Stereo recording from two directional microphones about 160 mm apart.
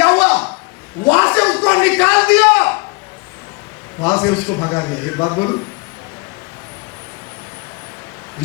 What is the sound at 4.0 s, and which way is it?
A man's voice, 20° left (ahead or behind).